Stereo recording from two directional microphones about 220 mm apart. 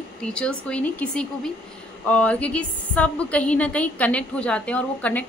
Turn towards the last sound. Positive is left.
turn(degrees=5)  # may be behind; listen again after turning